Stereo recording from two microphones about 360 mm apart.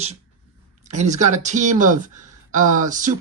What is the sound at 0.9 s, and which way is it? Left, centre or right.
Speech, centre.